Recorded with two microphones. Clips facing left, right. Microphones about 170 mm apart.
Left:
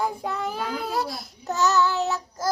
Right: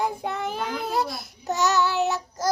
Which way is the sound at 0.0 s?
20° right (ahead or behind).